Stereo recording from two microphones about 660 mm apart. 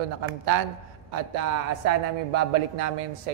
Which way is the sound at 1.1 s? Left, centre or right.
Right.